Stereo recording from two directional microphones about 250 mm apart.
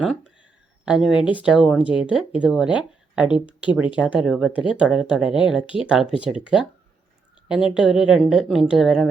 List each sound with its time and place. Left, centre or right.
0.0 s a woman's voice: centre
5.6 s speech: left
5.9 s a woman's voice: centre